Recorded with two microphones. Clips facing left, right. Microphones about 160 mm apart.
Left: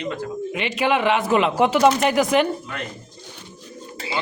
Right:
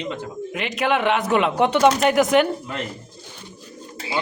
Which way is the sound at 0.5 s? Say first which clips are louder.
Even; centre (ahead or behind).